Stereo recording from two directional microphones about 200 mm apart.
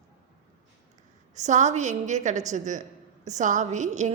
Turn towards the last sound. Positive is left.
turn(degrees=-35)  # may be behind; listen again after turning